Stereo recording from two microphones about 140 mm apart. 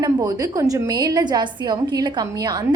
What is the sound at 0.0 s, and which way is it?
A woman's voice, 30° right (ahead or behind).